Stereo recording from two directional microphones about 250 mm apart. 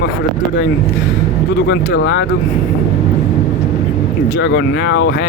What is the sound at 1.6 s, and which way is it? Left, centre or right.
Speech, left.